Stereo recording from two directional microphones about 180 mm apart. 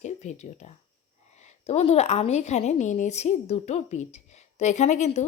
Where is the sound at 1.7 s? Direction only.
35° left (ahead or behind).